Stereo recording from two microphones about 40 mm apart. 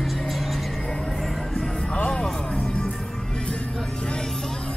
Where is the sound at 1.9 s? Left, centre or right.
Left.